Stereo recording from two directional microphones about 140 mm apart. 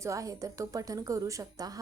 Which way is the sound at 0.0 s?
20° right (ahead or behind).